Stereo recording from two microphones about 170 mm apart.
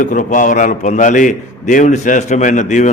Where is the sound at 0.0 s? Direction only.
50° left (ahead or behind).